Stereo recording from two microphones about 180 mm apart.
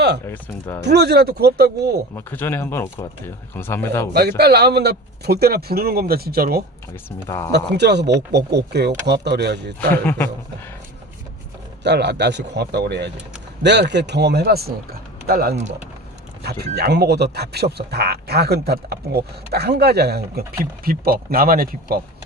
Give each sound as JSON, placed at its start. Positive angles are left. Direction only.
{"t": 0.3, "sound": "speech", "side_deg": 15}
{"t": 0.8, "sound": "speech", "side_deg": -70}
{"t": 2.1, "sound": "speech", "side_deg": 10}
{"t": 4.1, "sound": "speech", "side_deg": -65}
{"t": 6.9, "sound": "speech", "side_deg": 15}
{"t": 7.5, "sound": "speech", "side_deg": -70}
{"t": 9.9, "sound": "speech", "side_deg": 10}
{"t": 11.8, "sound": "speech", "side_deg": -70}